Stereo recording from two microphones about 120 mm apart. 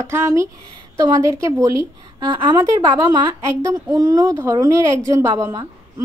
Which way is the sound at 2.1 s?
45° right (ahead or behind).